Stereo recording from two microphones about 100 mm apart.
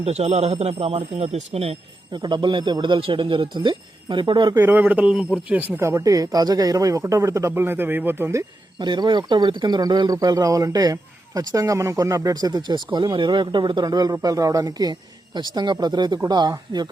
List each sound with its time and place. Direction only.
0.0 s speech: 90° right
2.1 s speech: 50° right (ahead or behind)
4.5 s a man's voice: 20° right (ahead or behind)
5.5 s speech: 20° right (ahead or behind)
5.8 s speech: 30° right (ahead or behind)
8.8 s speech: 50° right (ahead or behind)